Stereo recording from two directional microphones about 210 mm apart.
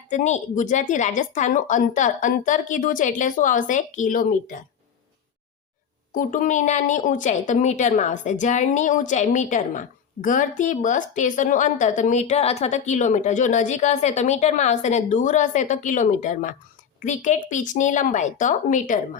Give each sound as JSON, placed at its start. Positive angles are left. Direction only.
{"t": 0.1, "sound": "a woman's voice", "side_deg": 35}
{"t": 6.1, "sound": "a woman's voice", "side_deg": 40}